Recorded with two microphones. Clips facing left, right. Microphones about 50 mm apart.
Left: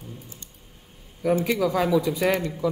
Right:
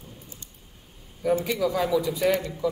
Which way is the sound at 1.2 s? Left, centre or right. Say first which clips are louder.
Left 2 dB; left.